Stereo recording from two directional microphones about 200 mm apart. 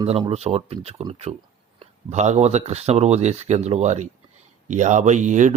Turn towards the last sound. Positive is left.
turn(degrees=-40)  # may be behind; listen again after turning